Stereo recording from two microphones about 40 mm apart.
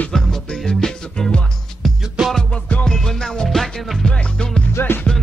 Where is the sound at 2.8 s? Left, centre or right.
Centre.